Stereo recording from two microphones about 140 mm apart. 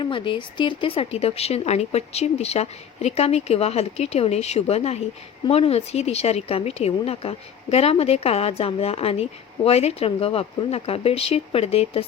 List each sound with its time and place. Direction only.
0.0 s speech: 35° left (ahead or behind)